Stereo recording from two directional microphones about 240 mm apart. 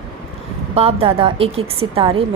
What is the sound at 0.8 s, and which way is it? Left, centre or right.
Speech, right.